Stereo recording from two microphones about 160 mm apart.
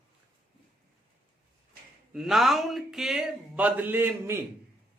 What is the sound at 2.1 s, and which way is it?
Speech, centre (ahead or behind).